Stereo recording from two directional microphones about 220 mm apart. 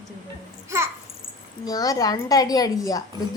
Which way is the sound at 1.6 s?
15° left (ahead or behind).